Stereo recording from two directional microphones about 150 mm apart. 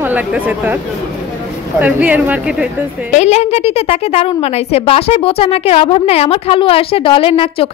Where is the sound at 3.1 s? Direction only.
50° left (ahead or behind).